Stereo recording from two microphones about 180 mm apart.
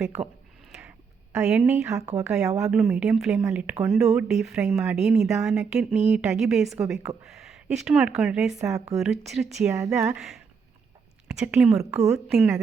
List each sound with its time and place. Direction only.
0.2 s speech: 35° right (ahead or behind)
0.7 s a sound: 5° right (ahead or behind)
2.2 s a woman's voice: 5° right (ahead or behind)
11.9 s speech: 15° right (ahead or behind)